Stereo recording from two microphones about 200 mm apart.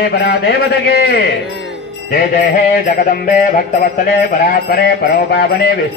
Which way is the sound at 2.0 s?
45° left (ahead or behind).